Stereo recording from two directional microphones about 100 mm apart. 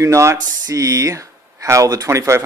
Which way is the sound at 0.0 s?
30° right (ahead or behind).